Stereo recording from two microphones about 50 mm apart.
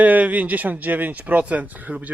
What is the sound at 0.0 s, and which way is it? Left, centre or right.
Speech, right.